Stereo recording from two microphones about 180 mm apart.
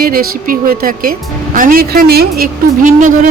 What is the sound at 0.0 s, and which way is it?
A woman's voice, 55° right (ahead or behind).